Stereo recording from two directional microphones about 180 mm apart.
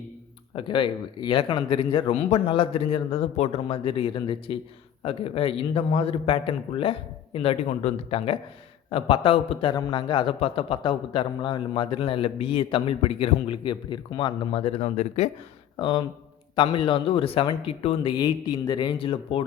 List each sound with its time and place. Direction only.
0.5 s a man's voice: 30° left (ahead or behind)
15.8 s a man's voice: 25° left (ahead or behind)